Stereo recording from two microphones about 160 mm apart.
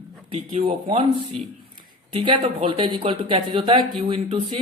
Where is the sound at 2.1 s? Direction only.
30° right (ahead or behind).